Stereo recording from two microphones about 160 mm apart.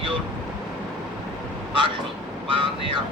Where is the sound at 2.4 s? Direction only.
35° right (ahead or behind).